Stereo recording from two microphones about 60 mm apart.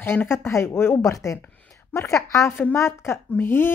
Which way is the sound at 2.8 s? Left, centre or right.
Left.